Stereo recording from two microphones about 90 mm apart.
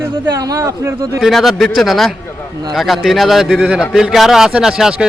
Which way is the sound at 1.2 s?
Centre (ahead or behind).